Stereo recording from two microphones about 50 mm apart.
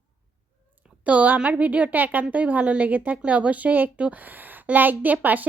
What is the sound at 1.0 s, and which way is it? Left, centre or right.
A woman's voice, right.